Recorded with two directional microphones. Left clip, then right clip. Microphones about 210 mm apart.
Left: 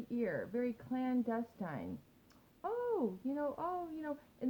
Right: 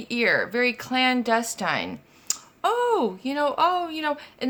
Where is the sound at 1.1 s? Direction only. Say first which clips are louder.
Right 15 dB; 30° right (ahead or behind).